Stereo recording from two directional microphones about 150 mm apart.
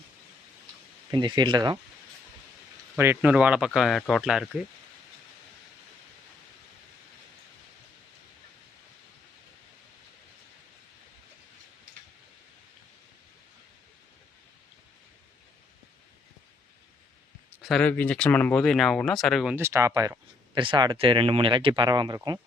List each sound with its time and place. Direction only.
1.1 s speech: 30° right (ahead or behind)
3.0 s speech: 10° right (ahead or behind)
17.6 s speech: 5° left (ahead or behind)
19.5 s speech: 20° right (ahead or behind)